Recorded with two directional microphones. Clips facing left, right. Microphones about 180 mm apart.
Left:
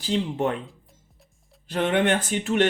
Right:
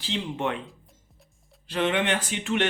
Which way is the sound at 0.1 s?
40° left (ahead or behind).